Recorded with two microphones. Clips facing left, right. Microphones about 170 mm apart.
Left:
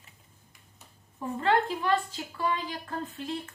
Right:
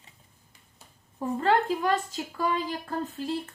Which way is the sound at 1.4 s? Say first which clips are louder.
Right 2 dB; 40° right (ahead or behind).